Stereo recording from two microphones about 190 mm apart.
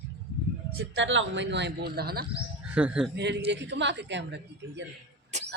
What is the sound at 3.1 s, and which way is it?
A woman's voice, 65° right (ahead or behind).